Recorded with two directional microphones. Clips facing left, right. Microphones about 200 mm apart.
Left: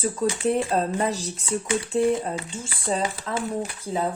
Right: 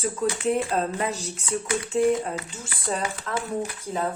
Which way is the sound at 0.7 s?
35° left (ahead or behind).